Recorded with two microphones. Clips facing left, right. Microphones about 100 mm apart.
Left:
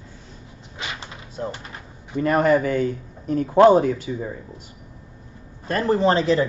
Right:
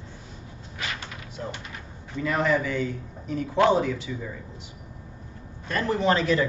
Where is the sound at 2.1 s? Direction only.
50° left (ahead or behind).